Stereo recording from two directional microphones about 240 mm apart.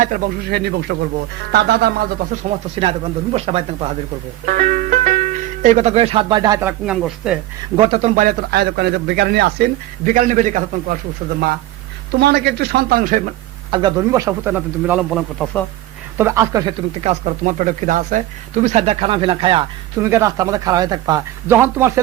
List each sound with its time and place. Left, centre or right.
0.0 s speech: right
4.4 s speech: right; by 7.3 s centre
7.8 s speech: right
12.2 s speech: right
13.7 s speech: centre
16.1 s speech: centre
17.0 s speech: right; by 22.0 s centre